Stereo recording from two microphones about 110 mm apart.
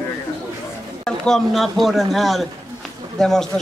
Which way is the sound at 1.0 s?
5° left (ahead or behind).